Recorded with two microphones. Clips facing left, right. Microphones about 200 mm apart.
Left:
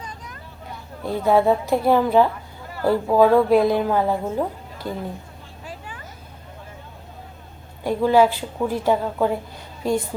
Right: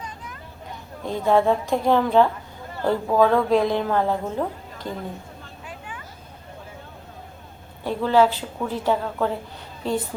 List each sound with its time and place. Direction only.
1.0 s a woman's voice: 10° left (ahead or behind)
5.6 s vehicle: 35° left (ahead or behind)
7.9 s a woman's voice: 10° left (ahead or behind)